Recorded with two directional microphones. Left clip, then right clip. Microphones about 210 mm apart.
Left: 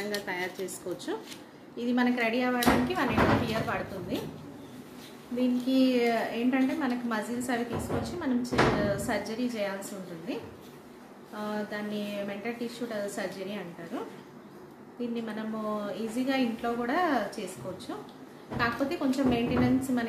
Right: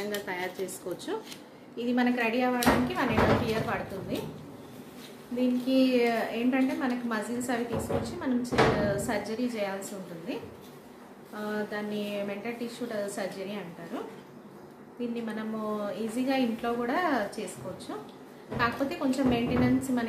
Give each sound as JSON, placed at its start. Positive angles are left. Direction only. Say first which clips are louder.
{"t": 0.1, "sound": "a woman's voice", "louder": "even", "side_deg": 0}
{"t": 5.3, "sound": "a woman's voice", "louder": "right 1 dB", "side_deg": 0}